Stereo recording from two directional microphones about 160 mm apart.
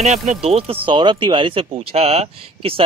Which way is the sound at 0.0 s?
45° right (ahead or behind).